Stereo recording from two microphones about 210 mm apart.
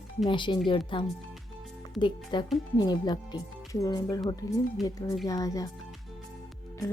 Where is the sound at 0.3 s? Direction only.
20° left (ahead or behind).